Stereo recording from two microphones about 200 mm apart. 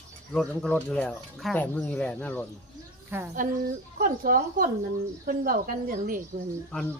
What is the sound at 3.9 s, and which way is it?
A woman's voice, 45° right (ahead or behind).